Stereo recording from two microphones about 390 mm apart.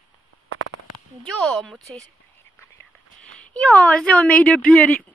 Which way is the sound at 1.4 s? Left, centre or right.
Centre.